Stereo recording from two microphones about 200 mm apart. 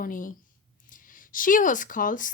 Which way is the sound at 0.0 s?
40° left (ahead or behind).